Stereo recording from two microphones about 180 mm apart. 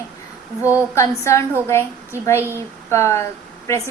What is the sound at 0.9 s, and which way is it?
Speech, 15° left (ahead or behind).